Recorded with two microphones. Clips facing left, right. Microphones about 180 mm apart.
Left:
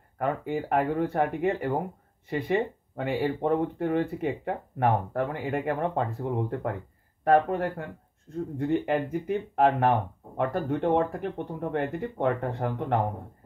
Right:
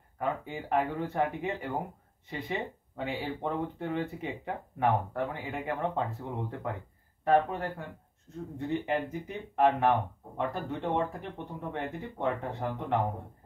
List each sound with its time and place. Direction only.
0.2 s speech: 55° left (ahead or behind)